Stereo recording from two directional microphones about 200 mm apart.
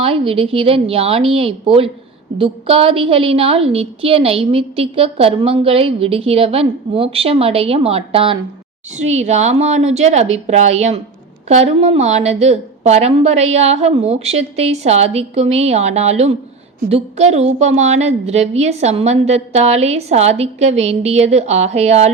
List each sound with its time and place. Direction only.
0.0 s a woman's voice: 30° right (ahead or behind)